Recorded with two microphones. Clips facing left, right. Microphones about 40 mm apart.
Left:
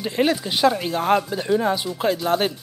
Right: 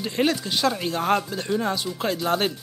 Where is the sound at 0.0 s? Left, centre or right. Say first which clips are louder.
Left 2 dB; centre.